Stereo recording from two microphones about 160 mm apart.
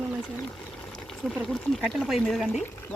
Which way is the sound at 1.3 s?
Centre (ahead or behind).